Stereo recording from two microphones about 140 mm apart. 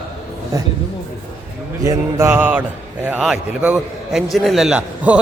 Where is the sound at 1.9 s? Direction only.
15° right (ahead or behind).